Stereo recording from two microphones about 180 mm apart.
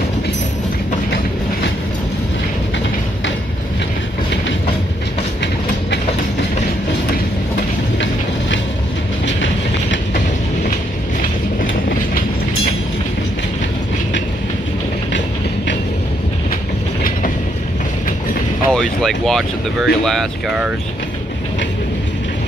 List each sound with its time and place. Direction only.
9.2 s train: 90° left
18.7 s speech: 5° left (ahead or behind)